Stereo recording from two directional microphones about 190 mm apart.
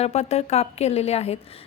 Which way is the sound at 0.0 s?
35° left (ahead or behind).